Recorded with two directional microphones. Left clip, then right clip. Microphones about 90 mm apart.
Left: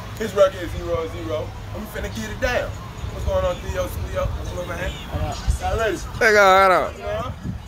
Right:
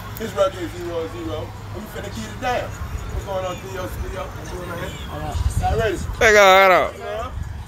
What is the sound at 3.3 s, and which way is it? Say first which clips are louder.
Speech: left 5 dB; 30° left (ahead or behind).